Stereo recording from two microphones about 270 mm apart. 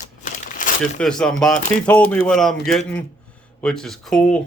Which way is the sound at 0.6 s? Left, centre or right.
Left.